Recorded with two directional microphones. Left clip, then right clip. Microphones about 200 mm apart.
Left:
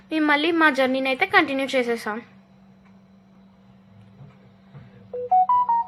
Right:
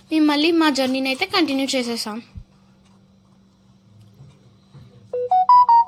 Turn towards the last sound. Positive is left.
turn(degrees=-55)  # may be behind; listen again after turning